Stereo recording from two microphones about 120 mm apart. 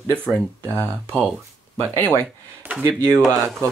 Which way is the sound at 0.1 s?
5° left (ahead or behind).